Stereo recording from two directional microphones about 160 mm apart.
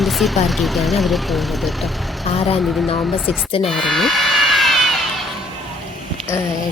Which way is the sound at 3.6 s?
Centre (ahead or behind).